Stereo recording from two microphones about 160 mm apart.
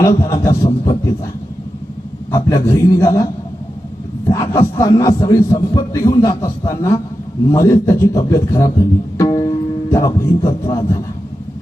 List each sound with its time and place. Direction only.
0.0 s a man's voice: 20° left (ahead or behind)
2.3 s a man's voice: 20° left (ahead or behind)
4.3 s a man's voice: 25° left (ahead or behind)
9.1 s music: 20° left (ahead or behind)